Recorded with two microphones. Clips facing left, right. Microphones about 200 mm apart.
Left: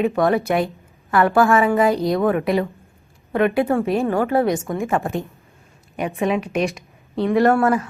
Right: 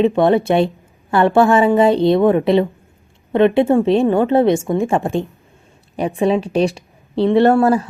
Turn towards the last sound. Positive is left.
turn(degrees=-30)  # may be behind; listen again after turning